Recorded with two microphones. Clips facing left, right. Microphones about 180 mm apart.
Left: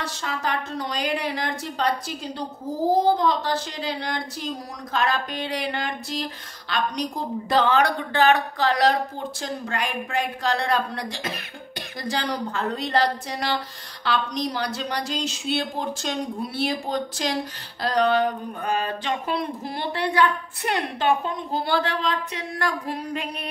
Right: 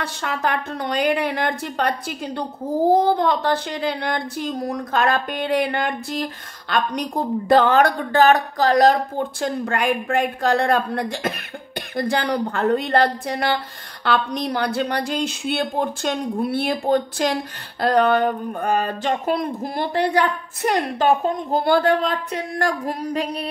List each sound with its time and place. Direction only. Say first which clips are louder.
0.0 s a woman's voice: right 4 dB; 60° right (ahead or behind)
9.4 s a woman's voice: right 6 dB; 55° right (ahead or behind); by 23.5 s 35° right (ahead or behind)